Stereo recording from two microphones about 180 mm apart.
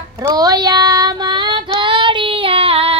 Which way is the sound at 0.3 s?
20° right (ahead or behind).